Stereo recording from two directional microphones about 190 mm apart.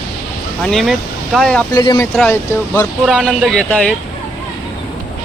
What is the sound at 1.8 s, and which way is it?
Speech, 20° left (ahead or behind).